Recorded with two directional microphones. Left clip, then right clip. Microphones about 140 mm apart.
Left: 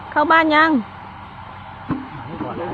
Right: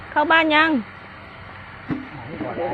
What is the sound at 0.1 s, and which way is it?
Speech, 5° right (ahead or behind).